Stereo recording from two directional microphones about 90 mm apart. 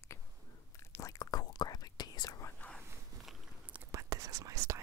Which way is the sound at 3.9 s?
40° right (ahead or behind).